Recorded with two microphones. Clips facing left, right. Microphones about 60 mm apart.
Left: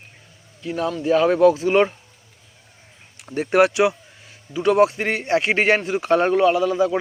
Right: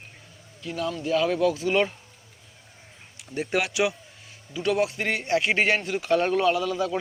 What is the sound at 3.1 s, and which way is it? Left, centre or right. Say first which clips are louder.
Speech: left 9 dB; left.